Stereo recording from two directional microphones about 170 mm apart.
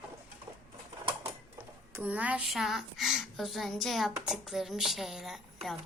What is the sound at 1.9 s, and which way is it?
A woman's voice, 10° right (ahead or behind).